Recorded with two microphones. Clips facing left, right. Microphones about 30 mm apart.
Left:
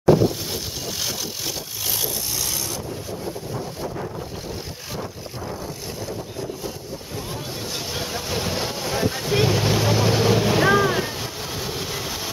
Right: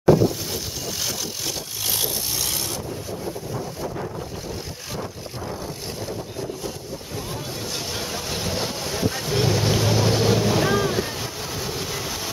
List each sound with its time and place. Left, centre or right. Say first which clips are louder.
3.5 s wind noise: even; centre
8.1 s boat: left 3 dB; centre
10.6 s boat: left 3 dB; left
11.6 s vehicle: even; centre